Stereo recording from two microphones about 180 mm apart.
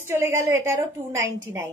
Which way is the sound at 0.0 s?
15° right (ahead or behind).